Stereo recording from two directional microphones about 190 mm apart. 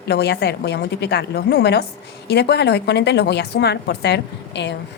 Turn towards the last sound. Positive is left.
turn(degrees=65)  # may be behind; listen again after turning